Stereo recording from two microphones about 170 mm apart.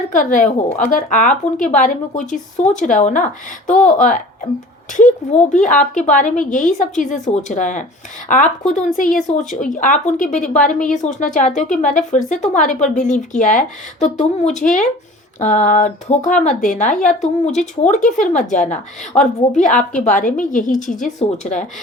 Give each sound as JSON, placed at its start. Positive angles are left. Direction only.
{"t": 0.1, "sound": "speech", "side_deg": 50}